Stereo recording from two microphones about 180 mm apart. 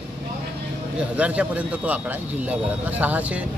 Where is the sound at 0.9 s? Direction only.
5° right (ahead or behind).